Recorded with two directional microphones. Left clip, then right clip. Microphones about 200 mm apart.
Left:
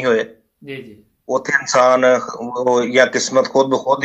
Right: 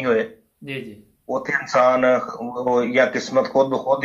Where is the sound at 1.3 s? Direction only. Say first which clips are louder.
Left 5 dB; 40° left (ahead or behind).